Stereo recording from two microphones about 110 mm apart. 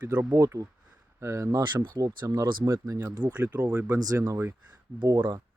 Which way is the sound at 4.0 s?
35° right (ahead or behind).